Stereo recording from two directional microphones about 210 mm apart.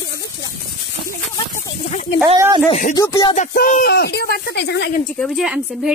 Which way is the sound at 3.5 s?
40° left (ahead or behind).